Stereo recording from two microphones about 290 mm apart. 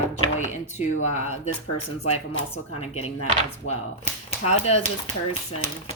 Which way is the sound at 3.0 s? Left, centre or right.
Left.